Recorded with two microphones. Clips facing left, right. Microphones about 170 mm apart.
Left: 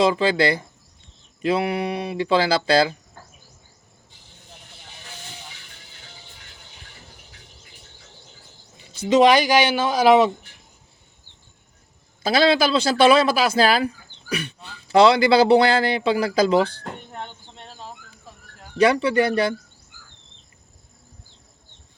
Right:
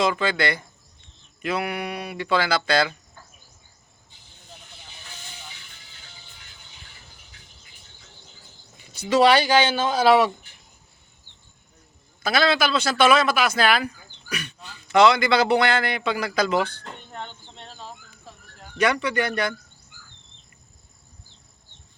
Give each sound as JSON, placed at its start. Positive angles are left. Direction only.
{"t": 0.0, "sound": "speech", "side_deg": 30}
{"t": 8.9, "sound": "speech", "side_deg": 25}
{"t": 12.2, "sound": "speech", "side_deg": 30}
{"t": 17.1, "sound": "cricket", "side_deg": 10}
{"t": 18.8, "sound": "speech", "side_deg": 30}